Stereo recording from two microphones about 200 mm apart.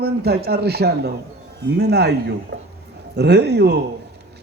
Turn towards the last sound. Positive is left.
turn(degrees=-55)  # may be behind; listen again after turning